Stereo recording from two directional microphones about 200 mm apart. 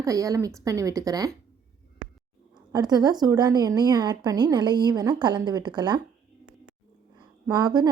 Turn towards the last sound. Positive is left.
turn(degrees=-20)  # may be behind; listen again after turning